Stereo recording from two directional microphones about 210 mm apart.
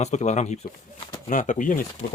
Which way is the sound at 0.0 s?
35° left (ahead or behind).